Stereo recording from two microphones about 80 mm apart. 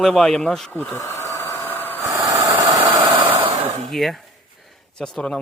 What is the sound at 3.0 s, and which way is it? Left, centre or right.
Hair dryer, right.